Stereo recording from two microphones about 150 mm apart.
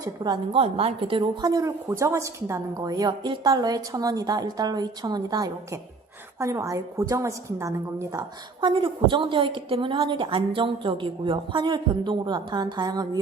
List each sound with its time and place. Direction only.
0.0 s a woman's voice: 30° right (ahead or behind)
8.6 s a woman's voice: 35° right (ahead or behind)